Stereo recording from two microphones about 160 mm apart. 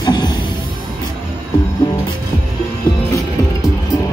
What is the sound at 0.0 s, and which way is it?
Music, 25° left (ahead or behind).